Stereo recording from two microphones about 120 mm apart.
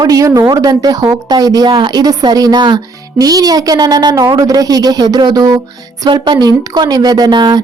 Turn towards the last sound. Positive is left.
turn(degrees=-40)  # may be behind; listen again after turning